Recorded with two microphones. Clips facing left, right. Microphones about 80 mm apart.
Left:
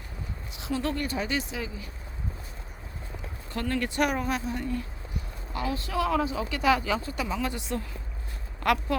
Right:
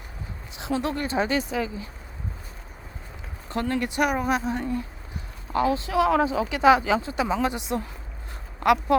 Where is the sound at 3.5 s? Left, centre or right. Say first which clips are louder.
Right 3 dB; right.